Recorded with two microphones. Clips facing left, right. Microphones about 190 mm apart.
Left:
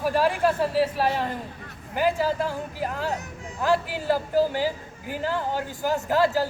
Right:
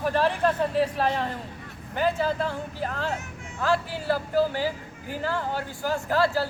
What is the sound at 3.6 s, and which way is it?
A man's voice, 15° left (ahead or behind).